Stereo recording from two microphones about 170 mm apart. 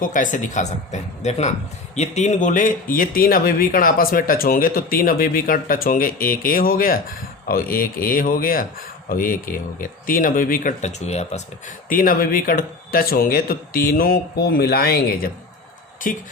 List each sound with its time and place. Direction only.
0.0 s speech: 50° left (ahead or behind)
11.9 s speech: 55° left (ahead or behind)